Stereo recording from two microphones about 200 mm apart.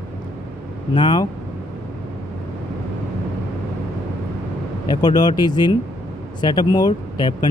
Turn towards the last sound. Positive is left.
turn(degrees=20)  # may be behind; listen again after turning